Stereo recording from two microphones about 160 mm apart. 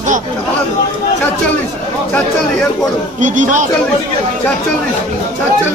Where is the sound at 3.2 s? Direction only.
55° right (ahead or behind).